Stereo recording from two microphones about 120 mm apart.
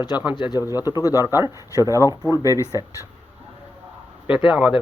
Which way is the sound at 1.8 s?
25° right (ahead or behind).